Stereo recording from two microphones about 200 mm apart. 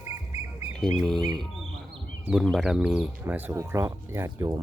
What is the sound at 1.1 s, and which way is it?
Speech, 20° right (ahead or behind).